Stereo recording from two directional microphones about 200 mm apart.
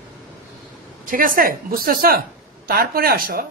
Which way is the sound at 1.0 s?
40° right (ahead or behind).